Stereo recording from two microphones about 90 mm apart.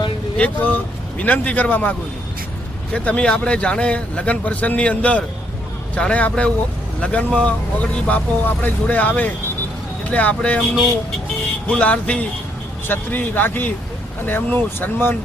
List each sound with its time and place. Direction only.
0.3 s speech: 15° left (ahead or behind)
11.7 s speech: 15° left (ahead or behind)